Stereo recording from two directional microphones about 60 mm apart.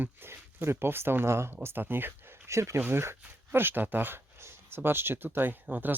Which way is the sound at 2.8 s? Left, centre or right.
Right.